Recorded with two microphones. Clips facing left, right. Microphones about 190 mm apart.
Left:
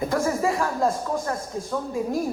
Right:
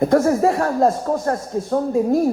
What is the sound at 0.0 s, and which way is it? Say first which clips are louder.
A woman's voice: right 8 dB; 55° right (ahead or behind).